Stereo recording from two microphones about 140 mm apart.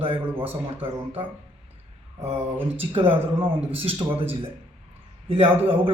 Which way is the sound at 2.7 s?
45° right (ahead or behind).